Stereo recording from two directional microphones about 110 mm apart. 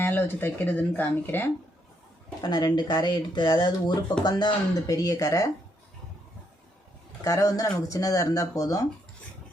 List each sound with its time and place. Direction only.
0.0 s speech: 20° left (ahead or behind)
2.4 s speech: 40° left (ahead or behind)
7.3 s speech: 30° left (ahead or behind)